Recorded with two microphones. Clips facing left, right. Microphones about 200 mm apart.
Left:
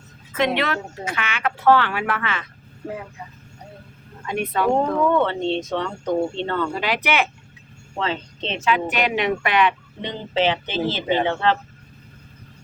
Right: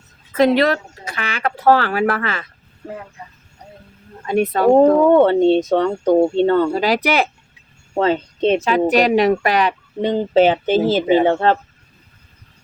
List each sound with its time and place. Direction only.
0.3 s speech: 35° right (ahead or behind)
4.3 s speech: 40° right (ahead or behind)